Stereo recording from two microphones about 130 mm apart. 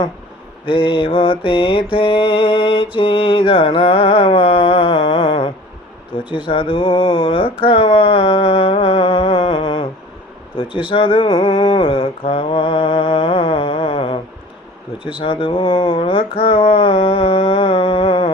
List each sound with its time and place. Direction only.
0.6 s mantra: 40° left (ahead or behind)